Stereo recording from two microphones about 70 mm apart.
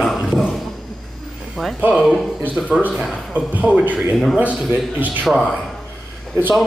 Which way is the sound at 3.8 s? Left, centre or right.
Right.